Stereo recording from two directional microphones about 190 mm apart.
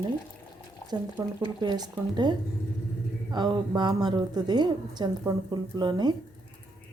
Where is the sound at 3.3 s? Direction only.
20° right (ahead or behind).